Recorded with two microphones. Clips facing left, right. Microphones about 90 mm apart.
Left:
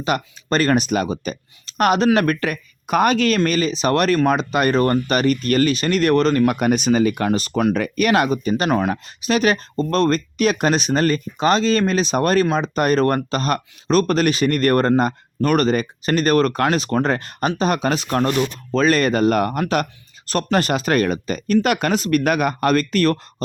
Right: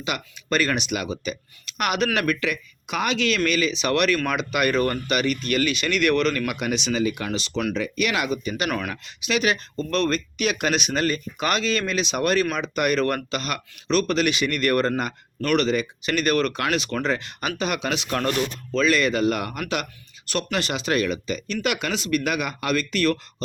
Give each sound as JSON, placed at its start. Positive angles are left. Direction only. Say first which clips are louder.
{"t": 0.0, "sound": "speech", "louder": "left 8 dB", "side_deg": 40}
{"t": 6.6, "sound": "speech", "louder": "left 7 dB", "side_deg": 45}
{"t": 18.2, "sound": "speech", "louder": "left 5 dB", "side_deg": 30}
{"t": 18.7, "sound": "speech", "louder": "left 4 dB", "side_deg": 40}